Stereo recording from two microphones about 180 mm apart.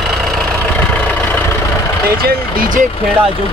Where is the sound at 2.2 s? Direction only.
55° right (ahead or behind).